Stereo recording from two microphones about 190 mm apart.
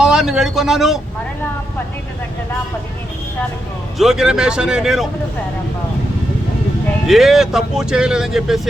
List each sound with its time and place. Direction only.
0.0 s speech: 5° right (ahead or behind)
3.9 s speech: centre (ahead or behind)
7.1 s speech: centre (ahead or behind)